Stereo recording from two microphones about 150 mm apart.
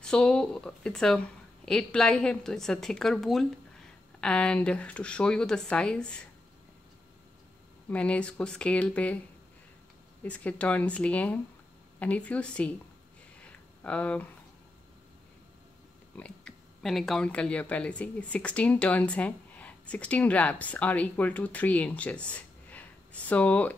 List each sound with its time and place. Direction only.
0.0 s a woman's voice: 5° left (ahead or behind)
7.9 s speech: 10° left (ahead or behind)
10.2 s speech: 10° left (ahead or behind)
13.5 s a sound: 10° left (ahead or behind)
16.2 s speech: 5° left (ahead or behind)